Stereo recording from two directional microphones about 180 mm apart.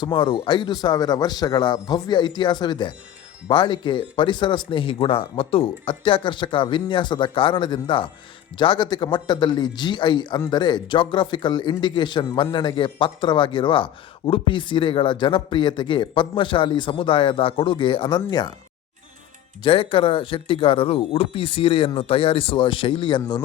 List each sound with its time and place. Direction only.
0.0 s a man's voice: 25° left (ahead or behind)
19.6 s speech: 30° left (ahead or behind)